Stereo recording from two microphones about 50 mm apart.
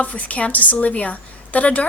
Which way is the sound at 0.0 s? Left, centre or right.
Left.